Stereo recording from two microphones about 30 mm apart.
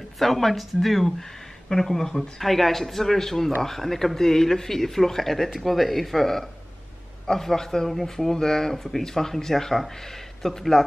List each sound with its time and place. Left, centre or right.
0.2 s speech: centre
7.9 s speech: centre
8.4 s speech: centre